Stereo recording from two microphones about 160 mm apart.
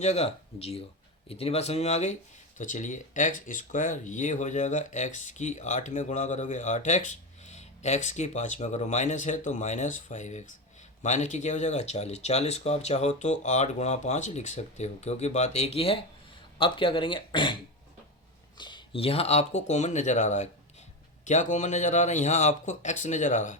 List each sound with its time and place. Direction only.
0.0 s speech: 40° left (ahead or behind)